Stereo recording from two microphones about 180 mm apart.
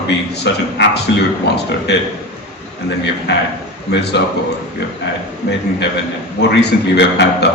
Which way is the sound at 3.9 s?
70° left (ahead or behind).